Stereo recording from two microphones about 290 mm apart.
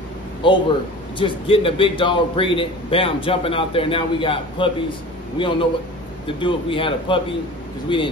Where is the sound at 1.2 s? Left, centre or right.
Centre.